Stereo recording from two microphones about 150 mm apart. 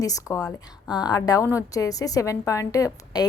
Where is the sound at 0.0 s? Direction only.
20° left (ahead or behind).